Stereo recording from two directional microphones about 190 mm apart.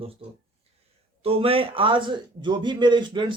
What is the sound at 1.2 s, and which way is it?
A man's voice, 30° right (ahead or behind).